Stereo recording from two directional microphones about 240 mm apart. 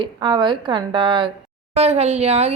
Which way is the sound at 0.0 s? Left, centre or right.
Centre.